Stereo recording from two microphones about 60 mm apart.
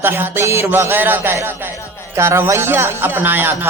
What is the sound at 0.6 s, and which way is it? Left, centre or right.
Speech, right.